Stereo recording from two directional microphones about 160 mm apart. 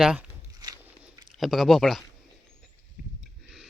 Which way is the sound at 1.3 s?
Centre (ahead or behind).